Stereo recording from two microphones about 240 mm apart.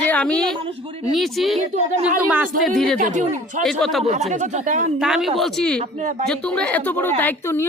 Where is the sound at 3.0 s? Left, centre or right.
Right.